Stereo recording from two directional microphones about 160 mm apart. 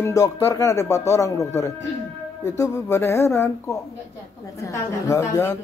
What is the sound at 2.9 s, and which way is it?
Speech, 15° left (ahead or behind).